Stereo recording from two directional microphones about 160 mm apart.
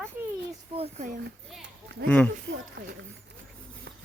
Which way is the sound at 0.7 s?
40° right (ahead or behind).